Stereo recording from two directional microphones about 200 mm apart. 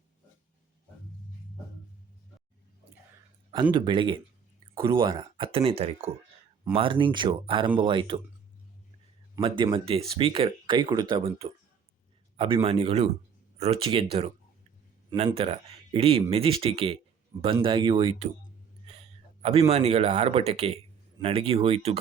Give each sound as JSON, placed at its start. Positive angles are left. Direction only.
{"t": 3.5, "sound": "speech", "side_deg": -20}
{"t": 9.3, "sound": "speech", "side_deg": -20}
{"t": 12.6, "sound": "speech", "side_deg": -30}
{"t": 15.4, "sound": "speech", "side_deg": -30}
{"t": 18.9, "sound": "a sound", "side_deg": -30}
{"t": 19.7, "sound": "speech", "side_deg": -30}